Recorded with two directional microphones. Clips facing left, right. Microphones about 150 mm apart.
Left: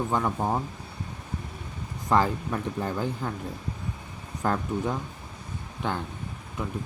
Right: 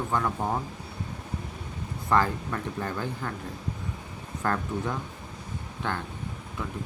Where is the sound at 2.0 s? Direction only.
15° left (ahead or behind).